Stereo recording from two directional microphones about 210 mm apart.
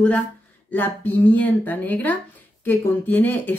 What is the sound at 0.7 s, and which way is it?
Speech, 10° left (ahead or behind).